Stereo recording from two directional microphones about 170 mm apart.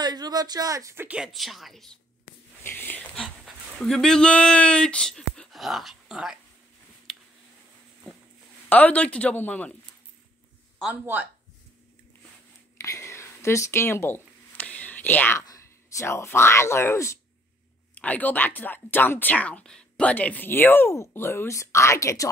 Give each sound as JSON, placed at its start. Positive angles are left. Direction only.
{"t": 0.0, "sound": "a woman's voice", "side_deg": -25}
{"t": 2.6, "sound": "speech", "side_deg": 10}
{"t": 8.1, "sound": "a sound", "side_deg": 5}
{"t": 8.6, "sound": "speech", "side_deg": 10}
{"t": 10.8, "sound": "a woman's voice", "side_deg": -10}
{"t": 12.8, "sound": "a sound", "side_deg": 15}
{"t": 17.9, "sound": "speech", "side_deg": 10}